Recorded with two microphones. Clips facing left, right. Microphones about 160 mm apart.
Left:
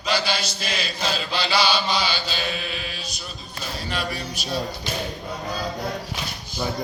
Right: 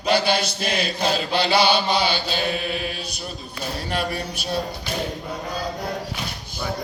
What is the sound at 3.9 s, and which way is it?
Chant, 55° right (ahead or behind).